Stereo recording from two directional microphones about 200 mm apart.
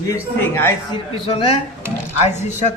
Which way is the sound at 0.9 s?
25° left (ahead or behind).